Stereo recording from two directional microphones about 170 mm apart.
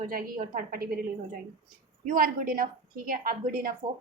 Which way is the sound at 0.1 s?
55° right (ahead or behind).